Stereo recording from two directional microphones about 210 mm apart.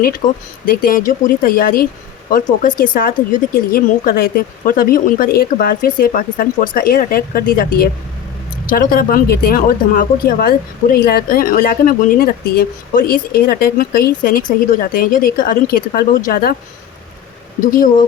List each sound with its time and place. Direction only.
0.2 s speech: 40° left (ahead or behind)